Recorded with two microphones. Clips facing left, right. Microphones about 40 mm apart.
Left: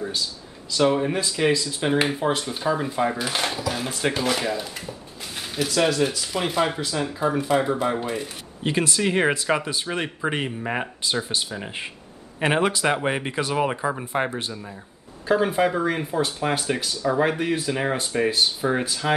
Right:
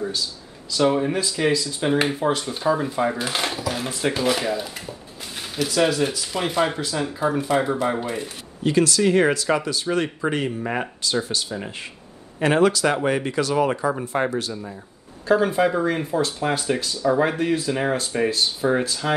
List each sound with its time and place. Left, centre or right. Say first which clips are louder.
0.7 s speech: right 1 dB; centre
8.6 s speech: right 4 dB; left
9.9 s speech: right 5 dB; centre
12.4 s speech: right 3 dB; left
13.7 s speech: right 3 dB; centre
14.5 s speech: right 3 dB; centre